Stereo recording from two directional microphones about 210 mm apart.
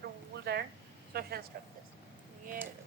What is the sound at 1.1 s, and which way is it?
Speech, 50° right (ahead or behind).